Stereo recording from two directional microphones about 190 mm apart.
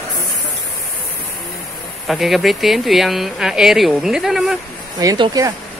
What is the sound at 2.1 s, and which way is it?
Speech, centre (ahead or behind).